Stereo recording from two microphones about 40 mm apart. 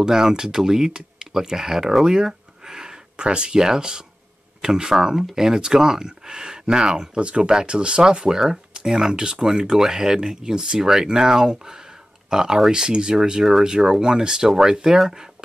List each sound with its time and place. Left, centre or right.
0.0 s speech: centre
7.2 s speech: right